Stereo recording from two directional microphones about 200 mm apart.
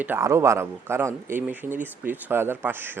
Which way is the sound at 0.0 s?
10° right (ahead or behind).